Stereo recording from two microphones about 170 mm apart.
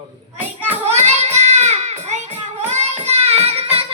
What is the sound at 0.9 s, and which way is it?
Child singing, 40° right (ahead or behind).